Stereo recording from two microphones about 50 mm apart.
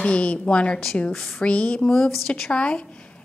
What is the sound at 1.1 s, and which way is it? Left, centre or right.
Speech, centre.